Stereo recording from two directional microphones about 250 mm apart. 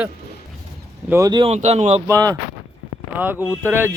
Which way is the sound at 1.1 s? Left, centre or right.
Centre.